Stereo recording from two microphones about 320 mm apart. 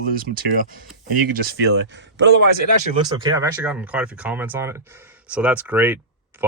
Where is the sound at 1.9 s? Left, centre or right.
Right.